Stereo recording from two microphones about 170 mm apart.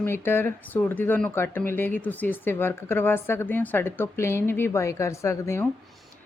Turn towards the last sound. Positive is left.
turn(degrees=15)  # may be behind; listen again after turning